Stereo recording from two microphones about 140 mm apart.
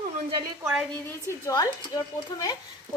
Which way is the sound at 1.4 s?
25° left (ahead or behind).